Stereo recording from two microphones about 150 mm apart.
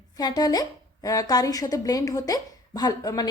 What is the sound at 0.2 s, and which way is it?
Speech, 25° left (ahead or behind).